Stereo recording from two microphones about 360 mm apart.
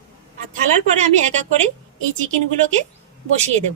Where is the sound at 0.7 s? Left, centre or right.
Centre.